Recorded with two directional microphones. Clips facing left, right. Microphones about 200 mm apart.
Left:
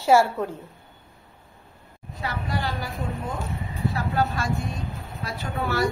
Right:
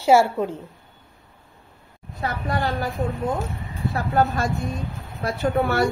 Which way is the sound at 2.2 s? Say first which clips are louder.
Right 4 dB; 55° right (ahead or behind).